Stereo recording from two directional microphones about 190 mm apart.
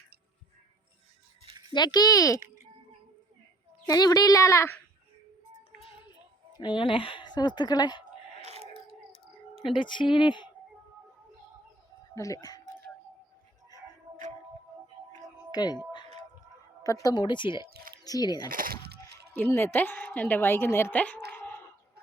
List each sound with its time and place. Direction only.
1.5 s a sound: 20° right (ahead or behind)
1.7 s a woman's voice: 20° left (ahead or behind)
3.8 s a woman's voice: 20° left (ahead or behind)
6.6 s a woman's voice: 25° left (ahead or behind)
8.4 s a sound: 35° right (ahead or behind)
9.7 s a woman's voice: 25° left (ahead or behind)
12.1 s a woman's voice: 15° left (ahead or behind)
15.5 s a woman's voice: 20° left (ahead or behind)
16.8 s a woman's voice: 20° left (ahead or behind)
17.7 s music: 55° right (ahead or behind)
18.0 s speech: 20° left (ahead or behind)
18.4 s coin: 50° right (ahead or behind)
19.3 s a woman's voice: 10° left (ahead or behind)
21.3 s a sound: 10° left (ahead or behind)